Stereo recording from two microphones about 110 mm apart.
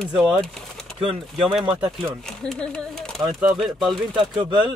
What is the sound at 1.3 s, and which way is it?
Speech, centre (ahead or behind).